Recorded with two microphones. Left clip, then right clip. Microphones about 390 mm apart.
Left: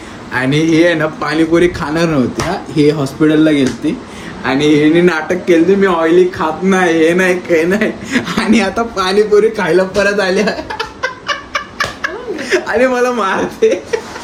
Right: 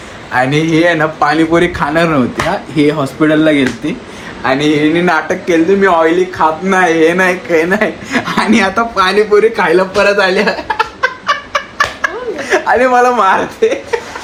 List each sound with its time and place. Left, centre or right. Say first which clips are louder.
0.3 s speech: right 2 dB; centre
3.2 s speech: right 2 dB; centre
11.5 s a sound: right 4 dB; centre